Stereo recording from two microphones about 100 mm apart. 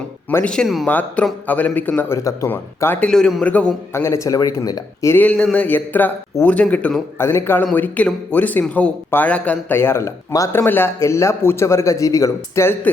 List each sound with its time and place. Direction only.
0.4 s speech: 5° left (ahead or behind)
0.9 s speech: 15° left (ahead or behind)
2.1 s speech: 30° left (ahead or behind)
2.5 s a man's voice: 20° left (ahead or behind)
3.1 s a man's voice: 5° left (ahead or behind)
3.4 s speech: 15° left (ahead or behind)
3.9 s speech: 30° left (ahead or behind)
5.1 s speech: 15° left (ahead or behind)
7.2 s a man's voice: 25° left (ahead or behind)
7.7 s a man's voice: 10° left (ahead or behind); by 12.7 s 30° left (ahead or behind)